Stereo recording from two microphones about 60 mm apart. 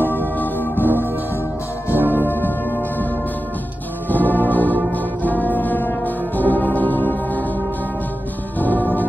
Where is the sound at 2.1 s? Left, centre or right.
Left.